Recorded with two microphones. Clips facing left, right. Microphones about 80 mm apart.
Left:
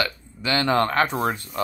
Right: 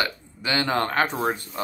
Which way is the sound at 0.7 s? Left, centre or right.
Left.